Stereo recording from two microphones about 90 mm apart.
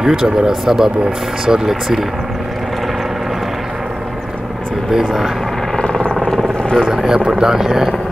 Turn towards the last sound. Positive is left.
turn(degrees=-5)  # may be behind; listen again after turning